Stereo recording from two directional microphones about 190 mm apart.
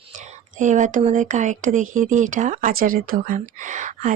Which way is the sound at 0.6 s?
40° right (ahead or behind).